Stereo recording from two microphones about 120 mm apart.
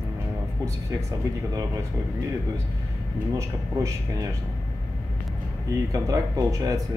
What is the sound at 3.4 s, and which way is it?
Speech, 25° right (ahead or behind).